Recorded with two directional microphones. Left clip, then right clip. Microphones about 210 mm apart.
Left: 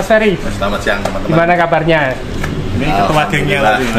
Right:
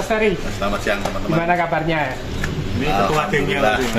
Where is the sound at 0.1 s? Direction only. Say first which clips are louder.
Left 8 dB; 40° left (ahead or behind).